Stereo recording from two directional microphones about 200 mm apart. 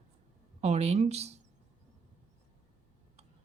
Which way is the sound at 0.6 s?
30° right (ahead or behind).